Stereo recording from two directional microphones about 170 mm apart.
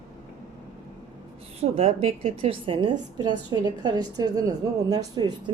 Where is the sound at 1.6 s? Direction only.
35° right (ahead or behind).